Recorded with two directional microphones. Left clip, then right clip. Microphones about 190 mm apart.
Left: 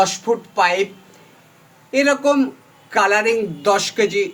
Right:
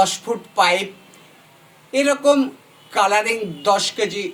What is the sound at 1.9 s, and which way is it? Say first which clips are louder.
A man's voice: even; 40° left (ahead or behind).